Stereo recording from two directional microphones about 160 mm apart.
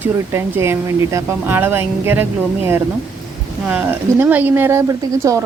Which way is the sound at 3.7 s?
10° right (ahead or behind).